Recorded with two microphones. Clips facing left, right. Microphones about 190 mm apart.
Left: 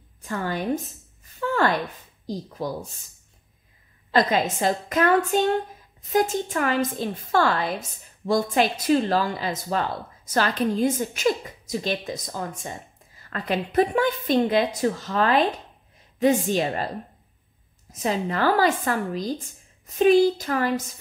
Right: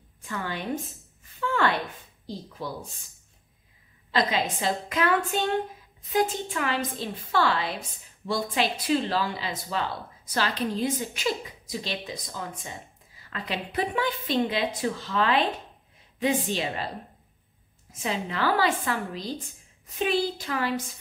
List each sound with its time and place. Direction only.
0.2 s a woman's voice: 45° left (ahead or behind)
1.4 s a sound: 40° left (ahead or behind)
2.3 s speech: 40° left (ahead or behind)
4.1 s speech: 50° left (ahead or behind)
17.9 s speech: 45° left (ahead or behind)